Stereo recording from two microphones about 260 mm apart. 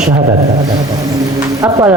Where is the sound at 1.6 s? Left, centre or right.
Centre.